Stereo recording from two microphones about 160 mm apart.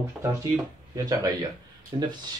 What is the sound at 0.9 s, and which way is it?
Speech, 20° right (ahead or behind).